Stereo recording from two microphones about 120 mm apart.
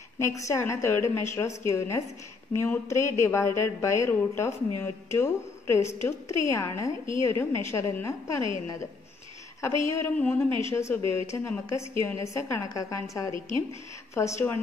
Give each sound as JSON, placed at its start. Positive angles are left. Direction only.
{"t": 0.2, "sound": "a woman's voice", "side_deg": 25}
{"t": 9.6, "sound": "a woman's voice", "side_deg": 25}
{"t": 10.1, "sound": "a woman's voice", "side_deg": 15}